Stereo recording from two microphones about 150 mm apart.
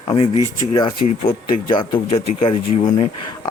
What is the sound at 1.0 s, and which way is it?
Speech, 70° left (ahead or behind).